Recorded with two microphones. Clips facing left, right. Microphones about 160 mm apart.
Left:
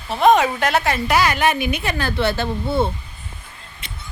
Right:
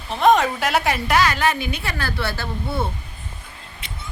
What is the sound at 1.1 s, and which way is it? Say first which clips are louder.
A woman's voice: left 1 dB; 15° left (ahead or behind).